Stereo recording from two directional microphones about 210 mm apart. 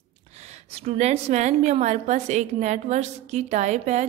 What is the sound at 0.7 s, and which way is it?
A woman's voice, 30° right (ahead or behind).